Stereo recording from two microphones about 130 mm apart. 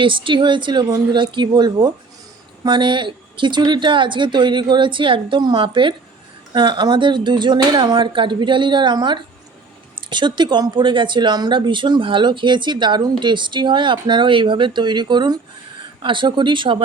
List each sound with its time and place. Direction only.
0.0 s speech: 40° right (ahead or behind)